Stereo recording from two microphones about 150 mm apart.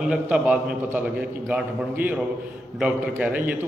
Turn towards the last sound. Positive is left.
turn(degrees=-10)  # may be behind; listen again after turning